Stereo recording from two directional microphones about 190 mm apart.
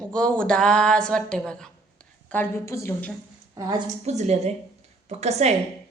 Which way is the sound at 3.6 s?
20° right (ahead or behind).